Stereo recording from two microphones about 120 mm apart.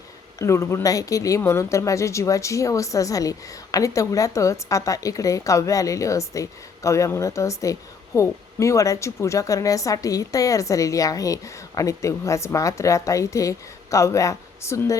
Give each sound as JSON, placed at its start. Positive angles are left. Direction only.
{"t": 0.3, "sound": "a woman's voice", "side_deg": 25}